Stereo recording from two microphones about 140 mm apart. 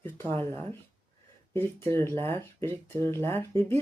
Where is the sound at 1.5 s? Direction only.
15° left (ahead or behind).